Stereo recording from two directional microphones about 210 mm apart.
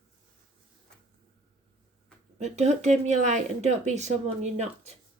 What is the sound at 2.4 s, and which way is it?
Speech, 35° right (ahead or behind).